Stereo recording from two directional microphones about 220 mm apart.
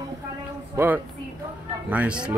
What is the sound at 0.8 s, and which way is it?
Speech, 15° right (ahead or behind).